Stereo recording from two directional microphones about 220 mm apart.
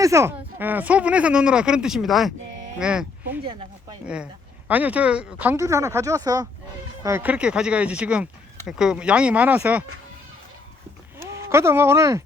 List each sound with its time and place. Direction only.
0.0 s speech: 15° right (ahead or behind)
3.4 s speech: 25° right (ahead or behind)
4.0 s speech: 5° right (ahead or behind)
11.3 s speech: 10° right (ahead or behind)